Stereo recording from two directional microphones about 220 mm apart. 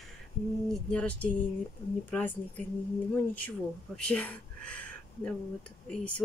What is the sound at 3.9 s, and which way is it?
Speech, 5° left (ahead or behind).